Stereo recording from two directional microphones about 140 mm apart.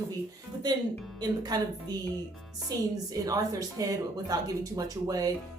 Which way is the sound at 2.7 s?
25° right (ahead or behind).